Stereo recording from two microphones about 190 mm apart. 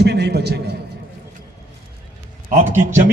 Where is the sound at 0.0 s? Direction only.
60° right (ahead or behind).